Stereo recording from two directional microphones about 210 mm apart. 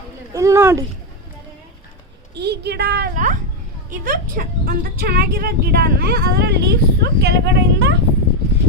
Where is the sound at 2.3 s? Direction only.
50° right (ahead or behind).